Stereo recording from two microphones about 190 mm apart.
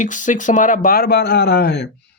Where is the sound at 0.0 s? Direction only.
40° left (ahead or behind).